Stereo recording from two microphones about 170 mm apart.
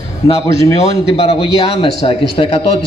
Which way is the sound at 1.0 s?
35° left (ahead or behind).